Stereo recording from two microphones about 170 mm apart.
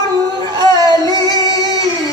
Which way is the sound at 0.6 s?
25° right (ahead or behind).